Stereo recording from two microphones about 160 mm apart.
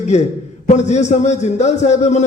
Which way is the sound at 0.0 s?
45° left (ahead or behind).